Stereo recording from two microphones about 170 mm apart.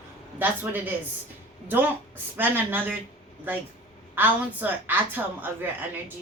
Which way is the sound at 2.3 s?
10° right (ahead or behind).